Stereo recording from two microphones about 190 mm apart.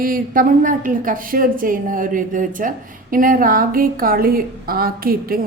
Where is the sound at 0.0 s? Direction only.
50° right (ahead or behind).